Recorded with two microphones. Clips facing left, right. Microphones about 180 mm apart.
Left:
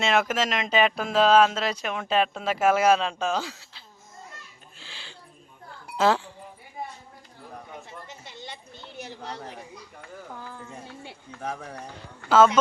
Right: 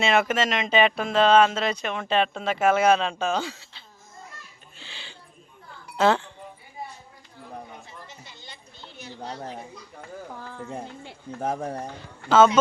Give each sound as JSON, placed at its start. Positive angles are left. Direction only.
{"t": 0.0, "sound": "speech", "side_deg": 0}
{"t": 4.8, "sound": "a sound", "side_deg": 0}
{"t": 6.0, "sound": "speech", "side_deg": 5}
{"t": 11.4, "sound": "speech", "side_deg": -45}